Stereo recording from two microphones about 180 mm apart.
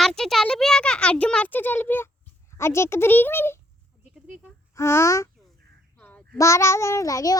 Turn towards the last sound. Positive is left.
turn(degrees=20)  # may be behind; listen again after turning